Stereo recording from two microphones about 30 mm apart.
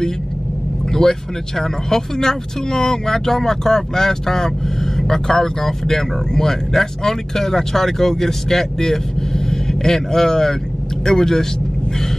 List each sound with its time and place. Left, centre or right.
1.0 s speech: centre